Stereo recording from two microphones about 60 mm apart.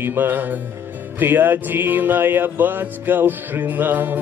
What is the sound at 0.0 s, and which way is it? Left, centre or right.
Music, right.